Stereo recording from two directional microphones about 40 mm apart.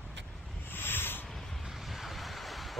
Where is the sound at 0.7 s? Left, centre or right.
Left.